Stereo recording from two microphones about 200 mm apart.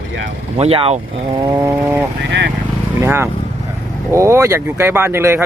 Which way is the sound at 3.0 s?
10° right (ahead or behind).